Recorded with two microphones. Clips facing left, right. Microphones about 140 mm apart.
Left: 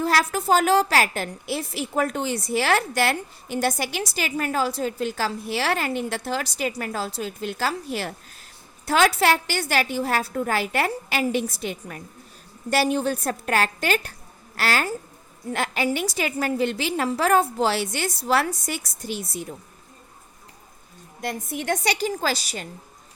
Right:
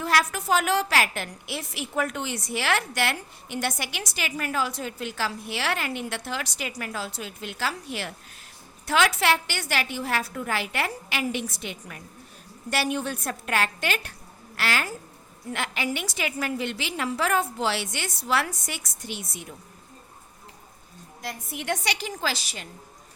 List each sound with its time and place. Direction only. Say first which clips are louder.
0.0 s a woman's voice: left 3 dB; 35° left (ahead or behind)
21.2 s a woman's voice: left 6 dB; 50° left (ahead or behind)